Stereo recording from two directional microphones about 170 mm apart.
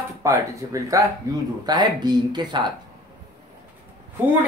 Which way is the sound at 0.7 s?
20° right (ahead or behind).